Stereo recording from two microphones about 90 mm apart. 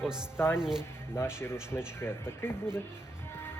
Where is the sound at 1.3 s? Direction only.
30° left (ahead or behind).